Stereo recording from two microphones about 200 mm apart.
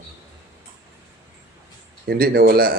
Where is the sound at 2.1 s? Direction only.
50° right (ahead or behind).